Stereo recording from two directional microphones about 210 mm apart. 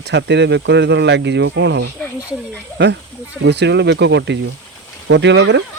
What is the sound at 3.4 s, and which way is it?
Speech, 55° right (ahead or behind).